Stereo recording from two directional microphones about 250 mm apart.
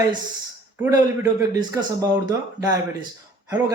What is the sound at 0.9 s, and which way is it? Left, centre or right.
Speech, centre.